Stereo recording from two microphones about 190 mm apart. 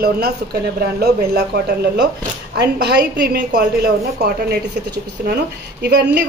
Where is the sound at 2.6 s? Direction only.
60° right (ahead or behind).